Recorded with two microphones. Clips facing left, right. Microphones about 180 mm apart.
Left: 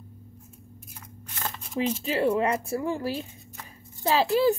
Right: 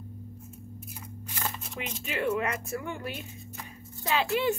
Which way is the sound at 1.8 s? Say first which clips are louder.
Left 8 dB; 30° left (ahead or behind).